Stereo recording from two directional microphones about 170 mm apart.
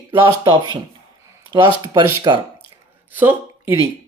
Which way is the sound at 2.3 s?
25° right (ahead or behind).